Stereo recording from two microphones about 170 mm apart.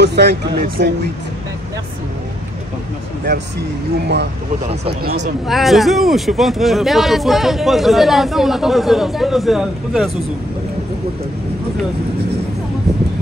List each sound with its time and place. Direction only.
0.0 s speech: 80° right
5.5 s speech: centre (ahead or behind)